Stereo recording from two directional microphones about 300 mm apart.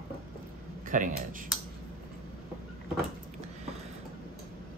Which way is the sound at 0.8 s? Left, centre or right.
Right.